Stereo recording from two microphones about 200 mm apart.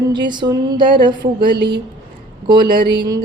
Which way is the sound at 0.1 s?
20° right (ahead or behind).